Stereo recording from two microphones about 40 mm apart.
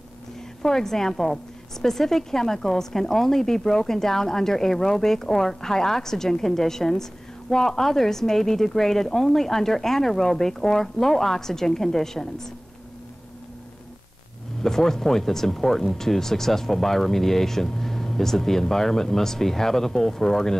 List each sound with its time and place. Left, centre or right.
0.6 s a woman's voice: centre
14.6 s a woman's voice: centre